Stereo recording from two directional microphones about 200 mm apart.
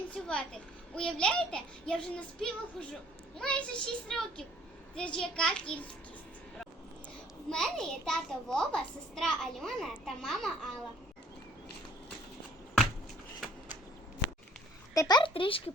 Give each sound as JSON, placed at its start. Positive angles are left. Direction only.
{"t": 0.1, "sound": "a child's voice", "side_deg": 5}
{"t": 7.5, "sound": "a child's voice", "side_deg": 0}
{"t": 14.9, "sound": "speech", "side_deg": 20}